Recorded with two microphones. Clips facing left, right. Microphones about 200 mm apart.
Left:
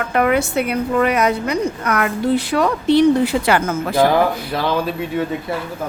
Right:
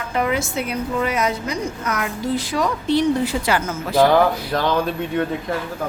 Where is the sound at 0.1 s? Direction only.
60° left (ahead or behind).